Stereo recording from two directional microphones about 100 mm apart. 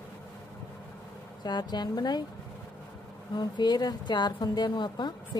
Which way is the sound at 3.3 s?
45° left (ahead or behind).